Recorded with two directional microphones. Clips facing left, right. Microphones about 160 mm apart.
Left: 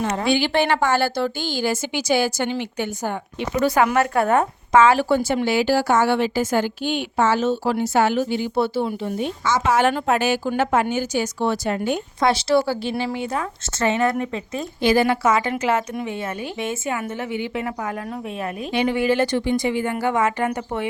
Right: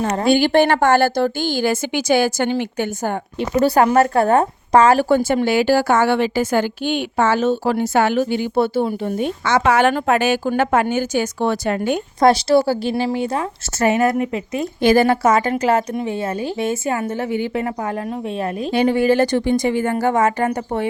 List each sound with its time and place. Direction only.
0.0 s a woman's voice: 40° right (ahead or behind)
3.6 s speech: 35° right (ahead or behind); by 11.9 s 60° right (ahead or behind)
12.2 s a woman's voice: 40° right (ahead or behind)
14.1 s speech: 15° right (ahead or behind)
14.8 s a woman's voice: 45° right (ahead or behind)
18.7 s a woman's voice: 40° right (ahead or behind)